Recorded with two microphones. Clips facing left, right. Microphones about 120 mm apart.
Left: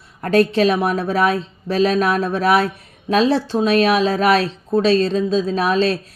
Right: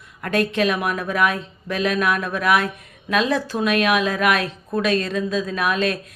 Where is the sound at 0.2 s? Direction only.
35° left (ahead or behind).